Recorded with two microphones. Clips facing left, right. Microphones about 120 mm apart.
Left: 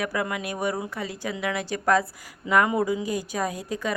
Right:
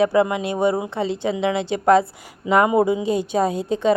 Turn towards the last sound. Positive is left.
turn(degrees=-25)  # may be behind; listen again after turning